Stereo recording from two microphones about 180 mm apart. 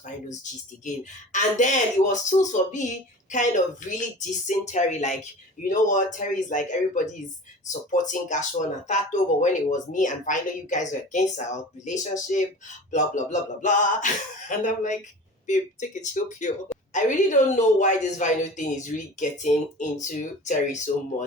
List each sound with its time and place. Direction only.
0.9 s speech: 45° left (ahead or behind)